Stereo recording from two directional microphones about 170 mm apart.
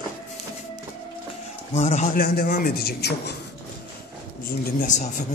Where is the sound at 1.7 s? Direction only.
40° left (ahead or behind).